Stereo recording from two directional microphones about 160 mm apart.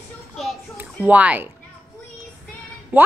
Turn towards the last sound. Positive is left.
turn(degrees=-10)  # may be behind; listen again after turning